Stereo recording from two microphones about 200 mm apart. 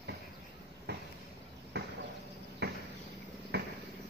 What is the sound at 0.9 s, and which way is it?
Vehicle, 55° right (ahead or behind).